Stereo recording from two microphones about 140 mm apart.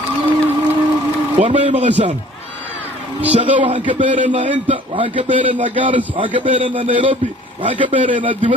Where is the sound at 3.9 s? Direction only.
65° right (ahead or behind).